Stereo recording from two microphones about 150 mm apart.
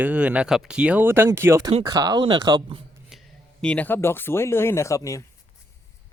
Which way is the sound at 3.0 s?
Centre (ahead or behind).